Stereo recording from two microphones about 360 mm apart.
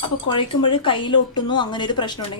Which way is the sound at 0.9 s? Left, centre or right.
Centre.